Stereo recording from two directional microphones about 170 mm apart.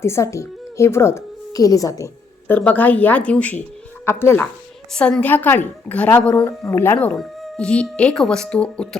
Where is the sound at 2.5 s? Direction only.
10° left (ahead or behind).